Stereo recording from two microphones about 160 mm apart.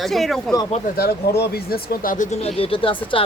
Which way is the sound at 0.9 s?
75° left (ahead or behind).